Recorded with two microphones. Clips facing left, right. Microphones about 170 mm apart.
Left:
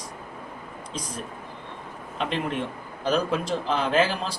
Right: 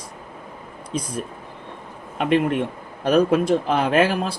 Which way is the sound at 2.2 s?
60° right (ahead or behind).